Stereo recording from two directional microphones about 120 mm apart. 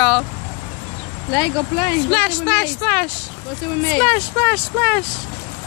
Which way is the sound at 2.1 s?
10° left (ahead or behind).